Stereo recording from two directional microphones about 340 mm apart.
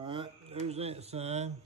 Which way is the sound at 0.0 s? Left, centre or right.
Centre.